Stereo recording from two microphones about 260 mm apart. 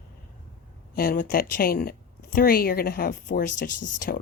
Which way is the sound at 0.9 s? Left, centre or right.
Left.